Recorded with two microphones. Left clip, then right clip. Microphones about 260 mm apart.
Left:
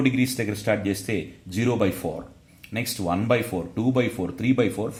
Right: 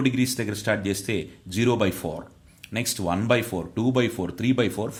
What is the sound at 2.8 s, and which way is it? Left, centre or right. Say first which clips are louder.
Speech: even; right.